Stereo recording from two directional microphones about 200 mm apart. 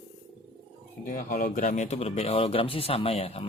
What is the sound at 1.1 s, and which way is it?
A man's voice, 45° left (ahead or behind).